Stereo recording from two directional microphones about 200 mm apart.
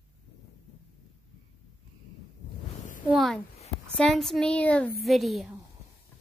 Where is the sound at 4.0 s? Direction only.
Centre (ahead or behind).